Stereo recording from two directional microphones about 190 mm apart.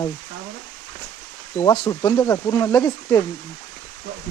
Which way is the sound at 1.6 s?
20° left (ahead or behind).